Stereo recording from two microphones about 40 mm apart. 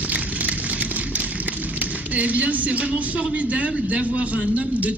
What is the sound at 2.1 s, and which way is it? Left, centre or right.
Speech, right.